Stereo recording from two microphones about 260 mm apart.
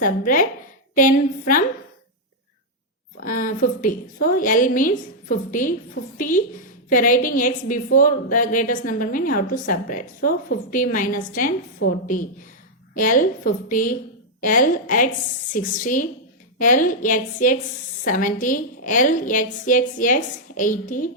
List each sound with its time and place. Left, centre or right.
0.0 s a woman's voice: left
3.2 s a woman's voice: left